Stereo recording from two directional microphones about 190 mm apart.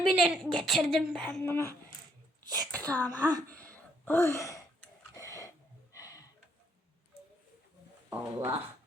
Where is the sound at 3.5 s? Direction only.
5° left (ahead or behind).